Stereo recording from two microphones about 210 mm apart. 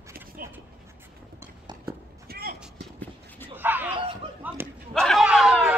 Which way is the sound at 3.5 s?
10° right (ahead or behind).